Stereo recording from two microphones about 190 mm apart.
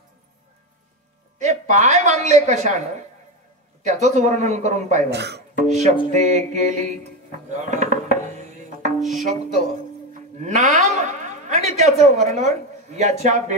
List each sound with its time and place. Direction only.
1.4 s a woman's voice: 40° right (ahead or behind)
3.8 s a man's voice: 40° right (ahead or behind)
5.1 s speech: 60° right (ahead or behind)
5.6 s a man's voice: 35° right (ahead or behind)
7.4 s music: 40° right (ahead or behind)
10.4 s a woman's voice: 40° right (ahead or behind)